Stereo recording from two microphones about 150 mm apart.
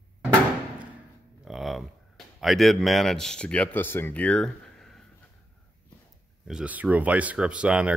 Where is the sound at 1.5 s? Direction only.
Centre (ahead or behind).